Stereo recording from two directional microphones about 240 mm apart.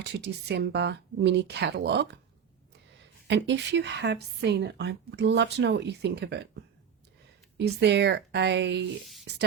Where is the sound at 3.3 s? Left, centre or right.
Right.